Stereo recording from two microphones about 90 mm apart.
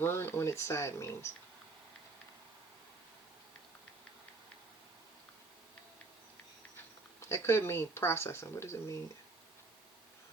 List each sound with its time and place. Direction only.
0.0 s speech: 25° left (ahead or behind)
6.7 s speech: 30° left (ahead or behind)